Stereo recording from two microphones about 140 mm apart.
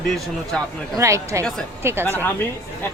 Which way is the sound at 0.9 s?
20° right (ahead or behind).